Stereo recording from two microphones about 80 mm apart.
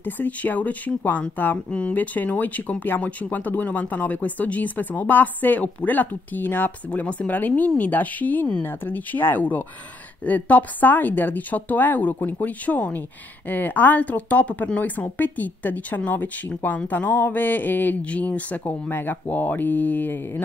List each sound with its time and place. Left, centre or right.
0.0 s speech: left